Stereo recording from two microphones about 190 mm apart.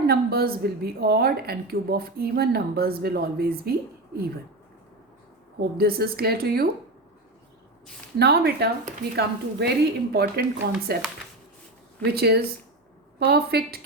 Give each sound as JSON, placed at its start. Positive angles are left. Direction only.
{"t": 0.1, "sound": "a woman's voice", "side_deg": -55}
{"t": 5.5, "sound": "a woman's voice", "side_deg": -55}
{"t": 8.2, "sound": "a woman's voice", "side_deg": -60}
{"t": 12.1, "sound": "a woman's voice", "side_deg": -55}